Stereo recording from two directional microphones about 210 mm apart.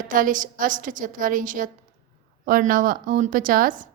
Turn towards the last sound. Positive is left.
turn(degrees=-40)  # may be behind; listen again after turning